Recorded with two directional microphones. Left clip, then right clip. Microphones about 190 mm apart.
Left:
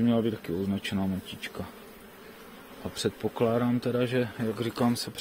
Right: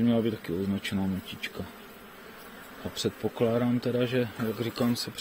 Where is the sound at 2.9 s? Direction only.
15° left (ahead or behind).